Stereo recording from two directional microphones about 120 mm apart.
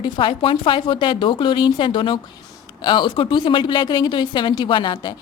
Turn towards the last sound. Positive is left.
turn(degrees=40)  # may be behind; listen again after turning